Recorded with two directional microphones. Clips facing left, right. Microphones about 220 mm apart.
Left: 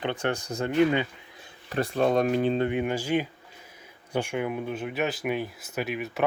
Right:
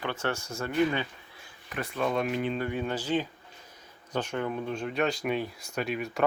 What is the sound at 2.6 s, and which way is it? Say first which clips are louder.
Speech: left 5 dB; 20° left (ahead or behind).